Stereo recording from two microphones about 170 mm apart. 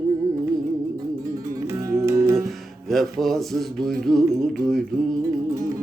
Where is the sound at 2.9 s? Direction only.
Centre (ahead or behind).